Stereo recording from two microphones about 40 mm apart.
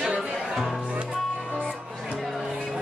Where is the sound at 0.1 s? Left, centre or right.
Right.